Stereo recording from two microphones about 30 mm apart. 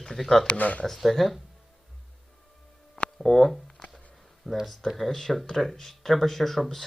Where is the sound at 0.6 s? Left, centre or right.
Left.